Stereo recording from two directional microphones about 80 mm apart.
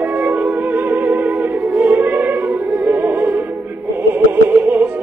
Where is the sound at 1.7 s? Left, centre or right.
Right.